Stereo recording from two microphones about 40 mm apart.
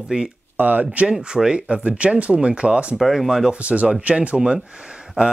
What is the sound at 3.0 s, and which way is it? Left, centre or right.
Speech, centre.